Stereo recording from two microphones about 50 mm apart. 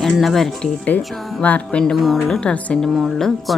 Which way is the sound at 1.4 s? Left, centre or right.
Left.